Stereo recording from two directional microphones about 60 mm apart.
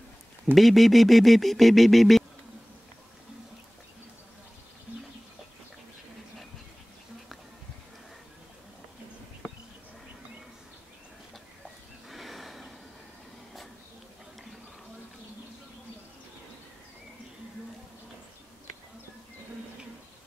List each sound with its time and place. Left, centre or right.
0.6 s speech: centre
12.1 s neigh: centre